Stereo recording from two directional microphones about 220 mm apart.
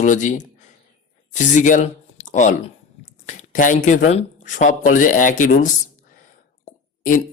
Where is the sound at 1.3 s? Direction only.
35° left (ahead or behind).